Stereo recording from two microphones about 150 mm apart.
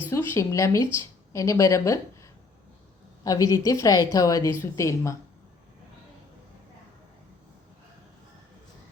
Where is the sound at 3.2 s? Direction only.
25° left (ahead or behind).